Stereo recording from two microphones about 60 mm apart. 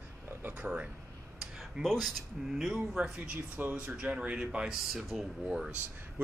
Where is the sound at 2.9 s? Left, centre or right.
Centre.